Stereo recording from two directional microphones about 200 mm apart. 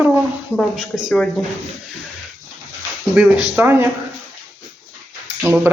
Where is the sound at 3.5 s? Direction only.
10° right (ahead or behind).